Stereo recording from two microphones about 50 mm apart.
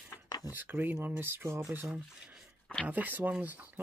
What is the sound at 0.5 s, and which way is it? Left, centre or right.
Speech, right.